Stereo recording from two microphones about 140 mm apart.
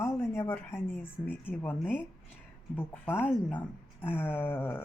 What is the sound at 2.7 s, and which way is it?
A woman's voice, 15° left (ahead or behind).